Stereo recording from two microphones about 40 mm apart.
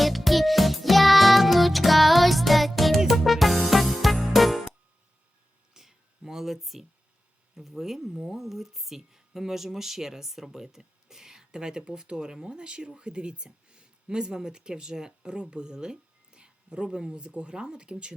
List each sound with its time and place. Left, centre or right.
0.0 s music: centre
5.7 s a sound: centre
7.5 s speech: centre; by 18.1 s right